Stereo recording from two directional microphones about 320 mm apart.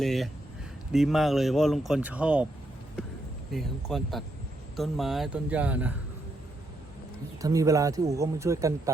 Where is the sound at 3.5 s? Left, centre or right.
Centre.